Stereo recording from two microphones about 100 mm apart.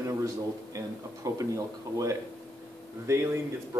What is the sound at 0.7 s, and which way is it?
Speech, 35° right (ahead or behind).